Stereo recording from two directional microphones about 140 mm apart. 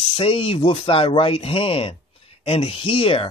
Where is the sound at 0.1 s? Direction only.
40° left (ahead or behind).